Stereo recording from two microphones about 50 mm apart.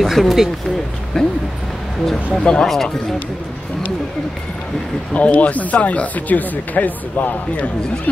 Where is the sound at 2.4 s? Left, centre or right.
Centre.